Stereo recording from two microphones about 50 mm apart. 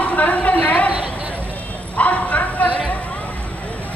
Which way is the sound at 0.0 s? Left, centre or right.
Left.